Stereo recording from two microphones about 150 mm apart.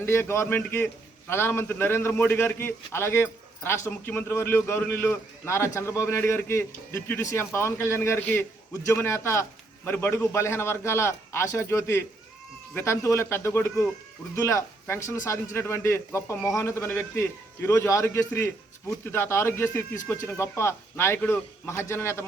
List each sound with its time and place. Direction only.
0.0 s a man's voice: 15° left (ahead or behind)